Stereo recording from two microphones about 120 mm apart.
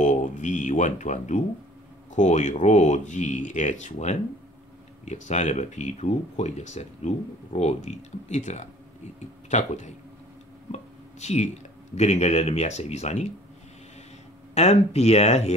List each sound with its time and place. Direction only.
0.0 s speech: 90° left
10.7 s a sound: 70° left (ahead or behind)
11.9 s speech: 65° left (ahead or behind)
14.5 s speech: 65° left (ahead or behind)